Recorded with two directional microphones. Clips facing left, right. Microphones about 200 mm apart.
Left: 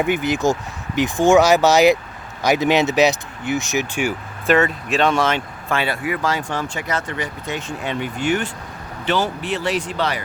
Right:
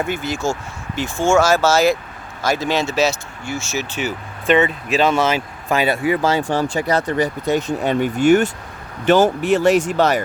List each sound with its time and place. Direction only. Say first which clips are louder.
0.0 s speech: left 3 dB; 15° left (ahead or behind)
4.4 s speech: right 1 dB; centre (ahead or behind)
5.6 s speech: right 5 dB; 20° right (ahead or behind); by 10.2 s 45° right (ahead or behind)